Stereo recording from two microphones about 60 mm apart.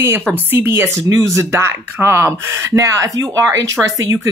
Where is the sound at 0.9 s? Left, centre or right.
Right.